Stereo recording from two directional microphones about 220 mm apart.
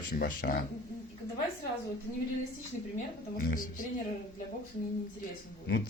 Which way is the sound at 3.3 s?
40° left (ahead or behind).